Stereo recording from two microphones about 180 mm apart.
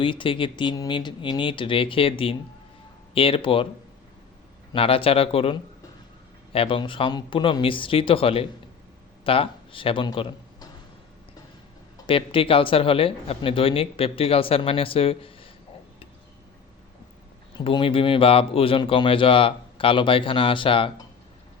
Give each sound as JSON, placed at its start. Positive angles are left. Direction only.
{"t": 0.0, "sound": "speech", "side_deg": 30}
{"t": 4.7, "sound": "a man's voice", "side_deg": 30}
{"t": 12.0, "sound": "speech", "side_deg": 30}
{"t": 17.6, "sound": "speech", "side_deg": 30}